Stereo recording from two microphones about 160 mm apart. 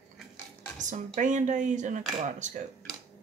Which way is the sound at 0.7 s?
50° right (ahead or behind).